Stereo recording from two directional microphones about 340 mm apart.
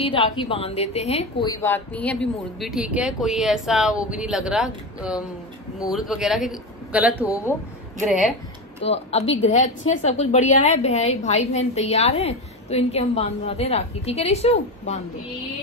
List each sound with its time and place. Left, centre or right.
0.0 s a woman's voice: centre
7.2 s a woman's voice: centre
8.8 s a woman's voice: centre